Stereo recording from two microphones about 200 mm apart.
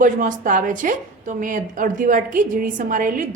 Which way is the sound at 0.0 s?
40° right (ahead or behind).